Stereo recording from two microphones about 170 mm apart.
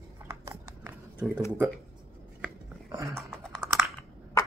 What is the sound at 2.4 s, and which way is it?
Computer keyboard, 15° right (ahead or behind).